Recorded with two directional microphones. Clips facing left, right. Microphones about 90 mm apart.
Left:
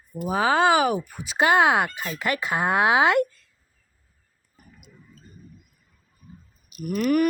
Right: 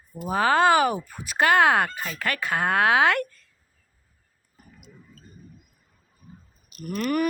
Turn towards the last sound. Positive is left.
turn(degrees=5)  # may be behind; listen again after turning